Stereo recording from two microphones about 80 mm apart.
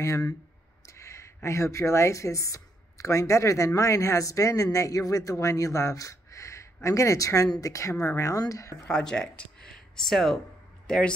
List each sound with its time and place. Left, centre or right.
0.0 s a woman's voice: left
8.8 s speech: centre
9.4 s a sound: centre
10.9 s speech: centre